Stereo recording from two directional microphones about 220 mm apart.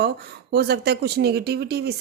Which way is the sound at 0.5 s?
45° right (ahead or behind).